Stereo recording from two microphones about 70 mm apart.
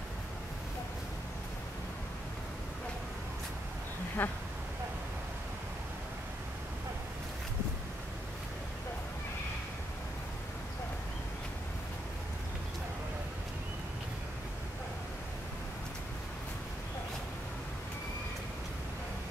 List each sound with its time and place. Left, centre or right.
4.2 s speech: left